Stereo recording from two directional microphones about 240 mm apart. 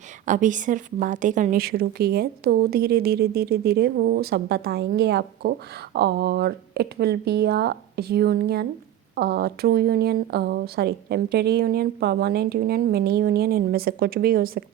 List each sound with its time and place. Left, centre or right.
0.3 s a woman's voice: right